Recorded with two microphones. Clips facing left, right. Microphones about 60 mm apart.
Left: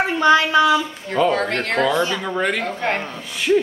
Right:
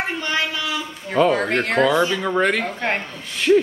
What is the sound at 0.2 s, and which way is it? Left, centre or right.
Speech, left.